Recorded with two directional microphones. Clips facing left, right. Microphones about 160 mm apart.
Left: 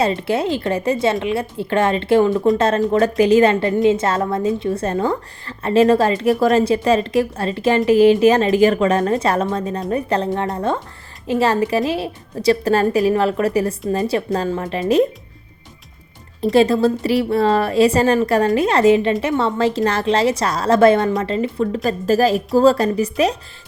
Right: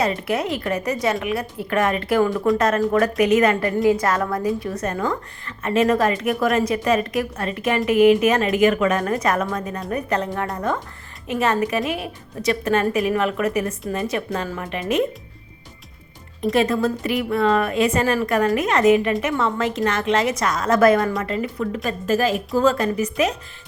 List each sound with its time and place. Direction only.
0.0 s a woman's voice: 30° left (ahead or behind)
16.4 s a woman's voice: 30° left (ahead or behind)